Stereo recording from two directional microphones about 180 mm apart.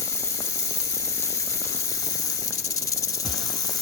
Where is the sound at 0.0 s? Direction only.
15° left (ahead or behind).